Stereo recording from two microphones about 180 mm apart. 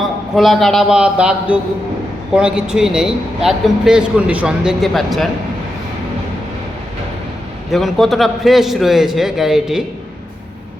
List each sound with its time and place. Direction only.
0.3 s speech: centre (ahead or behind)
7.7 s speech: centre (ahead or behind)